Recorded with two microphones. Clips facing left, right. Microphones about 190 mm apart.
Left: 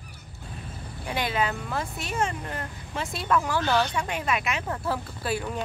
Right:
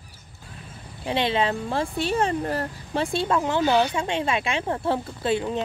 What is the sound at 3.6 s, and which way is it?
Speech, 10° right (ahead or behind).